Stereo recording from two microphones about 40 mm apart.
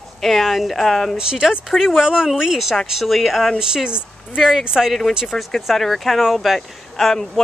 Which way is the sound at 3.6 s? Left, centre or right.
Centre.